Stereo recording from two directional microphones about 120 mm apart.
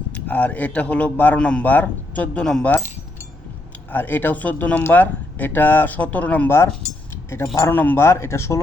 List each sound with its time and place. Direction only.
0.1 s speech: 15° left (ahead or behind)
3.9 s speech: 15° left (ahead or behind)